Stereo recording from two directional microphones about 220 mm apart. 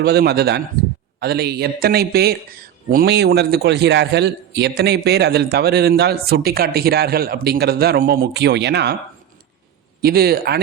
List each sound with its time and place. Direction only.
0.0 s speech: 45° right (ahead or behind)
10.0 s speech: 45° right (ahead or behind)